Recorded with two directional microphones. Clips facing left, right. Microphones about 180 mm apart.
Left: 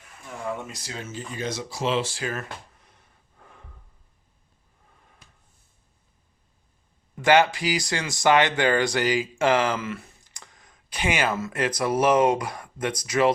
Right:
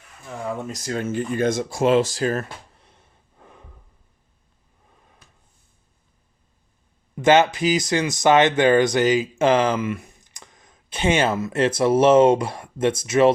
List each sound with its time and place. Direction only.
0.7 s speech: 50° right (ahead or behind)
2.8 s snort: 25° right (ahead or behind)
7.2 s speech: 20° right (ahead or behind)